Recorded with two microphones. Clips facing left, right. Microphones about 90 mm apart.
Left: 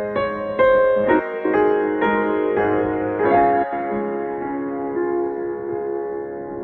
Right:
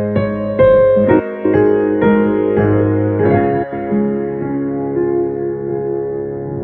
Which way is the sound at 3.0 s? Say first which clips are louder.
Right 6 dB; 10° left (ahead or behind).